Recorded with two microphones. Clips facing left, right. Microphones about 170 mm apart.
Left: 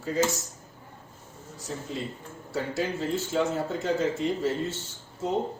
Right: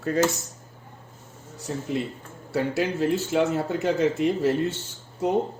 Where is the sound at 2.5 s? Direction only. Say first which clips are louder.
Right 5 dB; 65° right (ahead or behind).